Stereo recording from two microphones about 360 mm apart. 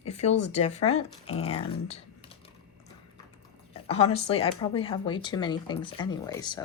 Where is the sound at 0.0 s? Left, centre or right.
Centre.